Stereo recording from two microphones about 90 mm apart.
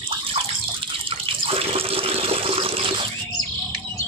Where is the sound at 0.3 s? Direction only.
85° right.